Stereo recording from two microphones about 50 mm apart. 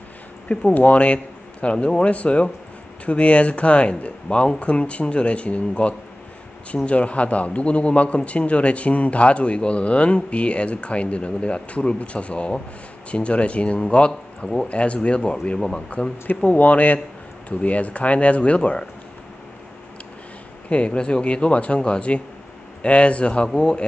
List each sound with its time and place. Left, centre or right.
0.5 s a man's voice: left
16.4 s a man's voice: left
20.7 s a man's voice: left